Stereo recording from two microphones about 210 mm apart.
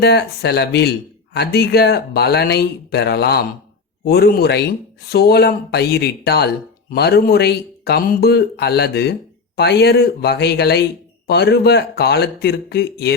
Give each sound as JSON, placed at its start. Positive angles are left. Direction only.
{"t": 0.0, "sound": "speech", "side_deg": 50}